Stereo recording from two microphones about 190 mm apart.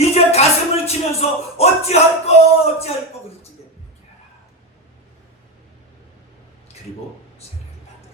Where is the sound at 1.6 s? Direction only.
35° left (ahead or behind).